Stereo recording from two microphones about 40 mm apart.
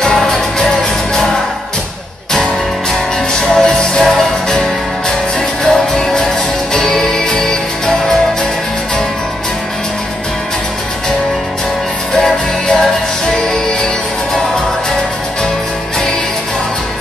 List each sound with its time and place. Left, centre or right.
0.0 s music: centre
3.3 s music: centre